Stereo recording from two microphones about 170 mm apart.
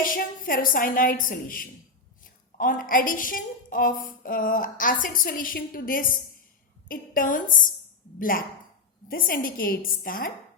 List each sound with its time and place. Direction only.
0.0 s a woman's voice: 55° left (ahead or behind)